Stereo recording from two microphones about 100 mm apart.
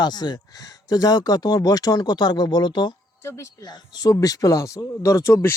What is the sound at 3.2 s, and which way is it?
A man's voice, 30° left (ahead or behind).